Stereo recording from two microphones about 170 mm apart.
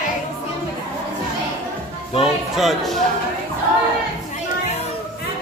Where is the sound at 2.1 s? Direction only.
Centre (ahead or behind).